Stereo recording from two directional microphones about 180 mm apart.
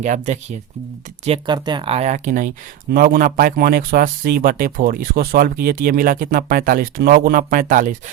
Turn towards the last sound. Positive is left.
turn(degrees=-50)  # may be behind; listen again after turning